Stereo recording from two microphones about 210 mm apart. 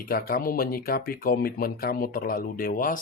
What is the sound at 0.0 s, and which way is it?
Speech, 45° left (ahead or behind).